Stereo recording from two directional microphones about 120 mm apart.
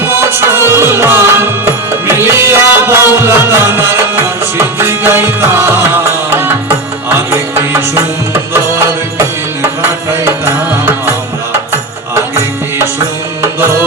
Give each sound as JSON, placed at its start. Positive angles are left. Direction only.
{"t": 0.0, "sound": "music", "side_deg": -20}
{"t": 10.2, "sound": "music", "side_deg": -20}